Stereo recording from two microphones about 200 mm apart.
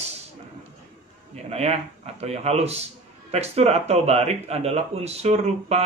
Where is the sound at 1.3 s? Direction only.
35° right (ahead or behind).